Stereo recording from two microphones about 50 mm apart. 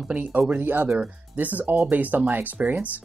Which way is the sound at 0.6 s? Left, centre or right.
Right.